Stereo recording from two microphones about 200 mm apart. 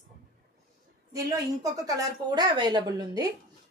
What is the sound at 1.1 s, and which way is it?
Speech, 15° right (ahead or behind).